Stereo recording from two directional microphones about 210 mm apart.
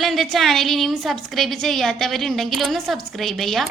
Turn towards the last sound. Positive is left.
turn(degrees=0)  # may be behind; listen again after turning